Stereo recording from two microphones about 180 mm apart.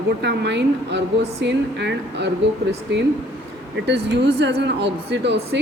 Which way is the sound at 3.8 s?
70° right (ahead or behind).